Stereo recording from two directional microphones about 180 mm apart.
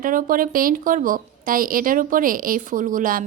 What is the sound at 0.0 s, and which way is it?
A woman's voice, 50° right (ahead or behind).